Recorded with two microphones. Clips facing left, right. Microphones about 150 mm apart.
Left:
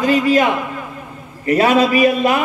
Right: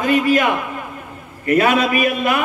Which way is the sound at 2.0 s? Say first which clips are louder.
Left 4 dB; 35° left (ahead or behind).